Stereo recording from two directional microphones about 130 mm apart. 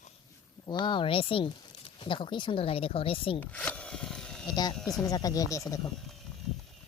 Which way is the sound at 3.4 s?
10° left (ahead or behind).